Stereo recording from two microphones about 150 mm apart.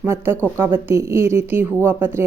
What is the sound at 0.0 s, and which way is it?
A woman's voice, 15° right (ahead or behind).